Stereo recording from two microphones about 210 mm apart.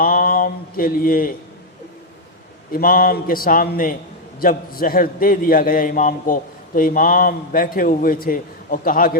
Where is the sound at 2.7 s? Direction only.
45° left (ahead or behind).